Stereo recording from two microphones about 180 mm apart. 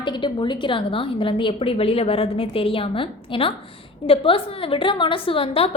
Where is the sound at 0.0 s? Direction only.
25° left (ahead or behind).